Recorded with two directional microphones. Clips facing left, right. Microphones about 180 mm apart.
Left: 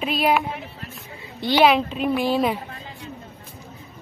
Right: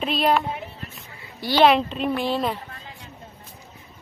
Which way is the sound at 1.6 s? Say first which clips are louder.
Even; 5° left (ahead or behind).